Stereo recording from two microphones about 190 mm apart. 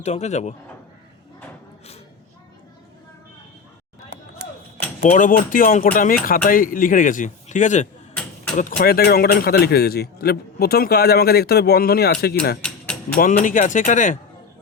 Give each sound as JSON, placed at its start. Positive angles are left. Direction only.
{"t": 0.0, "sound": "speech", "side_deg": 35}
{"t": 5.0, "sound": "a man's voice", "side_deg": 45}
{"t": 12.6, "sound": "a sound", "side_deg": 5}
{"t": 13.1, "sound": "speech", "side_deg": 45}